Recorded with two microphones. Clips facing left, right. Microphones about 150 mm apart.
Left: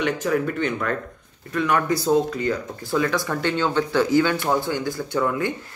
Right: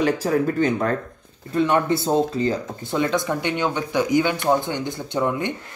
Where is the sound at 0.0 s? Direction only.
35° right (ahead or behind).